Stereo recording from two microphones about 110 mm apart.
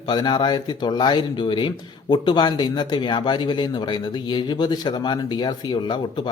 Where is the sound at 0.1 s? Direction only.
40° left (ahead or behind).